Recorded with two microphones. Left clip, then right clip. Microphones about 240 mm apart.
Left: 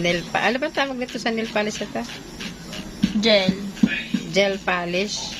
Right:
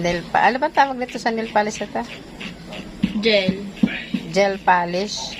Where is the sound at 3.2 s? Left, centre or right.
Left.